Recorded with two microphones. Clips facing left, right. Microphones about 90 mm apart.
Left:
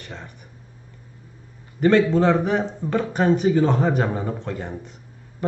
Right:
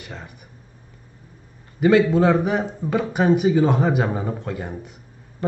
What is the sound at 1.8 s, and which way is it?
A man's voice, 5° right (ahead or behind).